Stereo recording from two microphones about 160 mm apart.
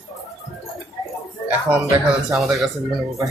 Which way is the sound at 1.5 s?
10° right (ahead or behind).